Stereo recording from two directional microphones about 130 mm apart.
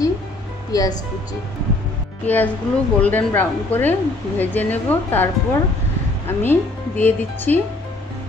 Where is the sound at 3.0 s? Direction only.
15° left (ahead or behind).